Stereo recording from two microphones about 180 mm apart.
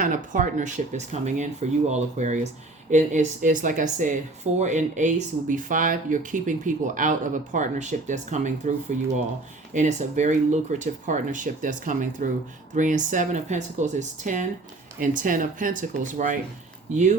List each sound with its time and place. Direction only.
0.0 s speech: 45° right (ahead or behind)
9.7 s speech: 40° right (ahead or behind)